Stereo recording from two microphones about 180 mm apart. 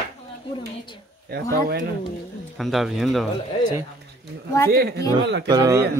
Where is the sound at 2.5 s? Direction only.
Centre (ahead or behind).